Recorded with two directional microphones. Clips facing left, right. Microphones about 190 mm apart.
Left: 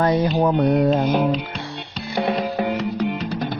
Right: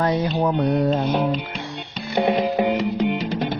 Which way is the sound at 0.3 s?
50° left (ahead or behind).